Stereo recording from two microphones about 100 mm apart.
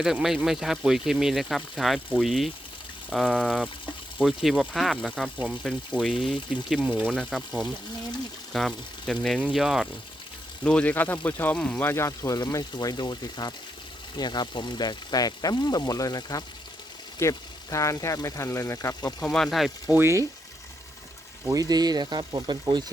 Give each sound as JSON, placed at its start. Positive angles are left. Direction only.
{"t": 0.0, "sound": "speech", "side_deg": -5}
{"t": 3.2, "sound": "speech", "side_deg": 10}
{"t": 4.2, "sound": "speech", "side_deg": -5}
{"t": 8.5, "sound": "speech", "side_deg": 5}
{"t": 10.6, "sound": "speech", "side_deg": 10}
{"t": 19.2, "sound": "speech", "side_deg": 5}
{"t": 19.9, "sound": "speech", "side_deg": -25}
{"t": 21.5, "sound": "speech", "side_deg": -40}